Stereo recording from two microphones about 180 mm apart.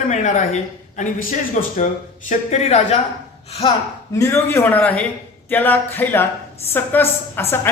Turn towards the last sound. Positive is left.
turn(degrees=10)  # may be behind; listen again after turning